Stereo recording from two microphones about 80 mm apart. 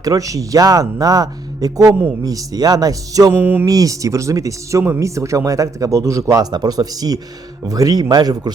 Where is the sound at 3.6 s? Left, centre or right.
Right.